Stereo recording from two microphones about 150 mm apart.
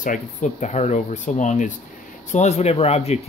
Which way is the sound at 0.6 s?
50° left (ahead or behind).